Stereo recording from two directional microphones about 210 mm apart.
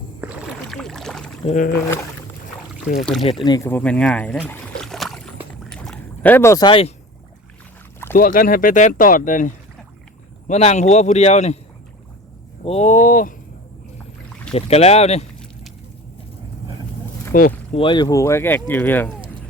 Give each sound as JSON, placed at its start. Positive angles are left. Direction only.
{"t": 0.2, "sound": "rowboat", "side_deg": -5}
{"t": 1.5, "sound": "speech", "side_deg": 35}
{"t": 3.0, "sound": "speech", "side_deg": 0}
{"t": 3.4, "sound": "speech", "side_deg": 15}
{"t": 4.4, "sound": "rowboat", "side_deg": 5}
{"t": 5.6, "sound": "boat", "side_deg": 5}
{"t": 8.1, "sound": "speech", "side_deg": 40}
{"t": 12.6, "sound": "speech", "side_deg": 30}
{"t": 14.5, "sound": "speech", "side_deg": 30}
{"t": 17.3, "sound": "speech", "side_deg": 40}
{"t": 17.7, "sound": "speech", "side_deg": 20}